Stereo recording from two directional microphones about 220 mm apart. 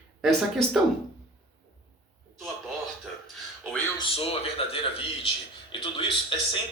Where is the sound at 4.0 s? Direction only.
25° left (ahead or behind).